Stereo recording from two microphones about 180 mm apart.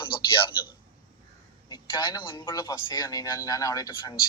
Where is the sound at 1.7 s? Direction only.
25° left (ahead or behind).